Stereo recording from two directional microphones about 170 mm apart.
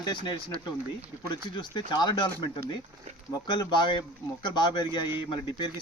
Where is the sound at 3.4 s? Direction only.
25° left (ahead or behind).